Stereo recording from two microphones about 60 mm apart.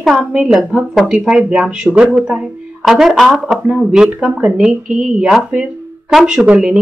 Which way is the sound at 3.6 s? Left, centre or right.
Centre.